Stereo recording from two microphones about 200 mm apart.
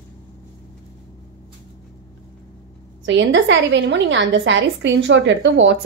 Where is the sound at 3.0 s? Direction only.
65° right (ahead or behind).